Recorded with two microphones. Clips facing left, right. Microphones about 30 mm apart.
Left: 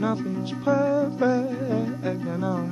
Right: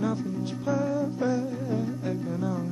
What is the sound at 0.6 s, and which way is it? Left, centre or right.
Music, left.